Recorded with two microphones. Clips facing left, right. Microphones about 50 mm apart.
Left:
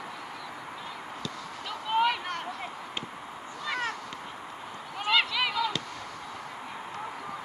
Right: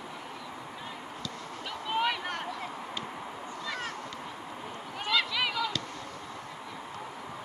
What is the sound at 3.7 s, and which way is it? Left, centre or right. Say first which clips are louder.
Cat: left 6 dB; left.